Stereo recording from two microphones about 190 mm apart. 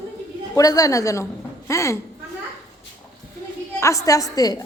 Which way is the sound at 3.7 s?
15° left (ahead or behind).